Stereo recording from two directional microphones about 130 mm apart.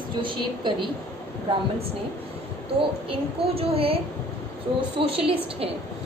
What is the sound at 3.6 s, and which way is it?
A woman's voice, 45° right (ahead or behind).